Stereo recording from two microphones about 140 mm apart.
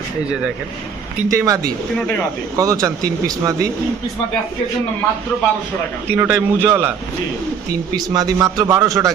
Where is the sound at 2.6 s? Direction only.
25° right (ahead or behind).